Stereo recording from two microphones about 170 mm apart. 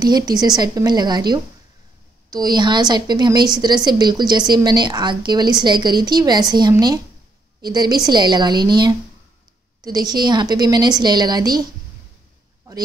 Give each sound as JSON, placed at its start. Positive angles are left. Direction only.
{"t": 0.0, "sound": "a woman's voice", "side_deg": -25}